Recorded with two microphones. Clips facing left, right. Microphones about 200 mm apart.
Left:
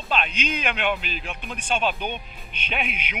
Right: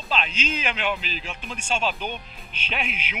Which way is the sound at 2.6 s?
55° left (ahead or behind).